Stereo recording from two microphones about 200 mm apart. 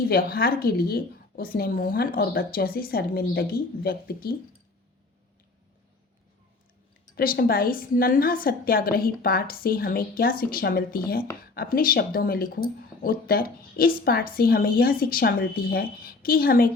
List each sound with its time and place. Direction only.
0.1 s speech: 45° left (ahead or behind)
7.2 s speech: 50° left (ahead or behind)